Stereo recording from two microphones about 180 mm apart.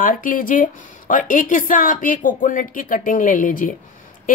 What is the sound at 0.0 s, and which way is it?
Speech, 50° left (ahead or behind).